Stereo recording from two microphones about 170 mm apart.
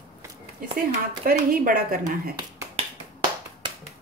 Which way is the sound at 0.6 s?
60° right (ahead or behind).